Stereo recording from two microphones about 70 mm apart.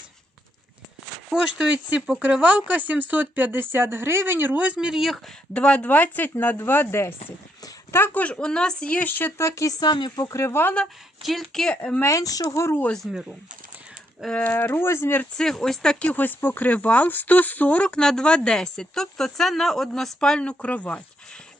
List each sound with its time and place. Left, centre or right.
1.3 s speech: centre
5.5 s speech: centre; by 8.1 s left
8.1 s speech: centre
9.4 s speech: left
9.8 s speech: left
10.2 s speech: left
11.2 s speech: centre
11.7 s speech: centre
12.0 s speech: left
13.1 s speech: centre
14.3 s speech: left
15.4 s speech: centre
16.1 s speech: left